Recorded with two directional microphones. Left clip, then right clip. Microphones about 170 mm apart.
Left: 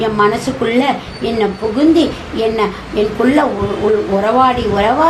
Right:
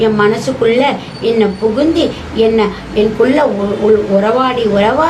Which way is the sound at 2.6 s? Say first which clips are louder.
Right 3 dB; 25° left (ahead or behind).